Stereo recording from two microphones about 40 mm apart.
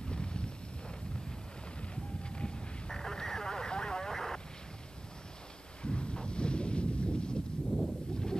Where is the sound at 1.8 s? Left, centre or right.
Left.